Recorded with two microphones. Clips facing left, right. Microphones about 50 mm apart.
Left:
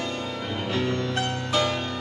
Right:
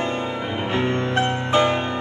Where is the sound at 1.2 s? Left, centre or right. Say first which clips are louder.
Right 8 dB; right.